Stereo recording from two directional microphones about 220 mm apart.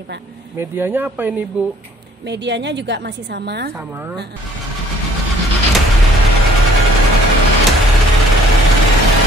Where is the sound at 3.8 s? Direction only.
10° right (ahead or behind).